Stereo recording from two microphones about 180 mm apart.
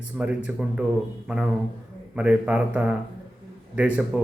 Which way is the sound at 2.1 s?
5° right (ahead or behind).